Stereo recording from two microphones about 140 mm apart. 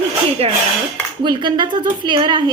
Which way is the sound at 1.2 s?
30° right (ahead or behind).